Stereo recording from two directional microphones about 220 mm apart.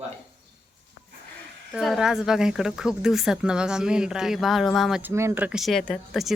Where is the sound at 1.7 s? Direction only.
Centre (ahead or behind).